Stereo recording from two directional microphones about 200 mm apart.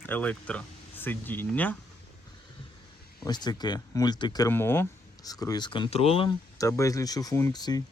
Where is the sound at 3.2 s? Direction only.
20° left (ahead or behind).